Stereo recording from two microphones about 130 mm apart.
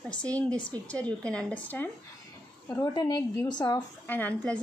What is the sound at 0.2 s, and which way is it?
Speech, 10° left (ahead or behind).